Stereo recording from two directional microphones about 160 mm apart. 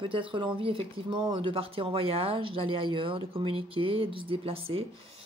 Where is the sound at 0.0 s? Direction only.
30° right (ahead or behind).